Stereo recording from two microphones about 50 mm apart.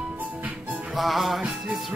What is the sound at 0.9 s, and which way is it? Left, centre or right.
Music, centre.